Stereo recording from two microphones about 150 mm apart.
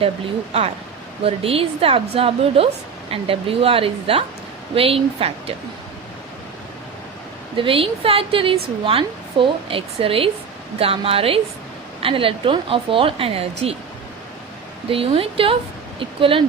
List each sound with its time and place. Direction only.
1.2 s speech: 40° right (ahead or behind)
7.5 s speech: 35° right (ahead or behind)
14.8 s speech: 35° right (ahead or behind)